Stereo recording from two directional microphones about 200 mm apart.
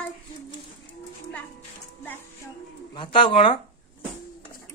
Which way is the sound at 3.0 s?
25° left (ahead or behind).